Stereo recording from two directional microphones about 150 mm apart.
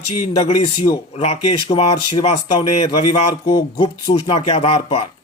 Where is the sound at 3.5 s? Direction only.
30° left (ahead or behind).